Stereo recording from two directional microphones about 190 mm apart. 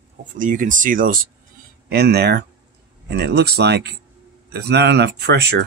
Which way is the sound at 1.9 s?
60° right (ahead or behind).